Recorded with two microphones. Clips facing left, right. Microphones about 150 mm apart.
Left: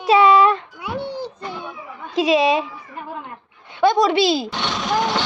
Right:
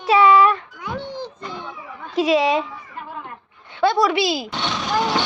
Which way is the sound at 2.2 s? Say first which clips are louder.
Left 1 dB; 15° left (ahead or behind).